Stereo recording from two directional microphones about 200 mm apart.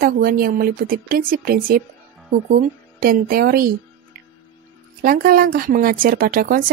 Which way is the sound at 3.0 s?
45° right (ahead or behind).